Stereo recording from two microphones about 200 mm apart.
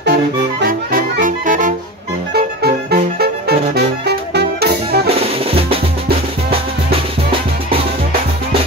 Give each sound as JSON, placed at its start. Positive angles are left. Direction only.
{"t": 0.0, "sound": "music", "side_deg": -55}
{"t": 2.3, "sound": "music", "side_deg": -50}
{"t": 5.5, "sound": "music", "side_deg": -30}